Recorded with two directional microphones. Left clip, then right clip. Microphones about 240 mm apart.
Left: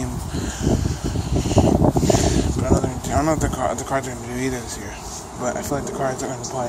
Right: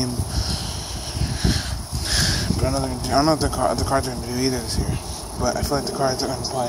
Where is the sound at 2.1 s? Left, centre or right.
Right.